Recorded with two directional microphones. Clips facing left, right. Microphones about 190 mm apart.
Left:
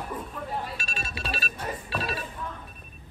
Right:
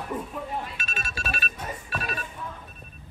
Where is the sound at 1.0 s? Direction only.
25° left (ahead or behind).